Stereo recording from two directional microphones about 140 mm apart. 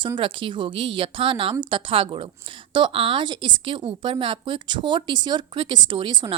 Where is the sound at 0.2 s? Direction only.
35° right (ahead or behind).